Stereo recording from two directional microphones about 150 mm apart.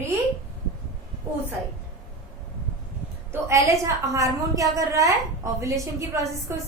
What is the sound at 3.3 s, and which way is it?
A woman's voice, 20° right (ahead or behind).